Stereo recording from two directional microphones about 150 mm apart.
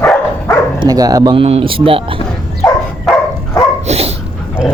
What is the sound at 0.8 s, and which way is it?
Speech, 25° right (ahead or behind).